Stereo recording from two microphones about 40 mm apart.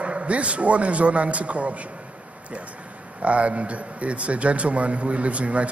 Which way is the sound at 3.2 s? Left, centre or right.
Right.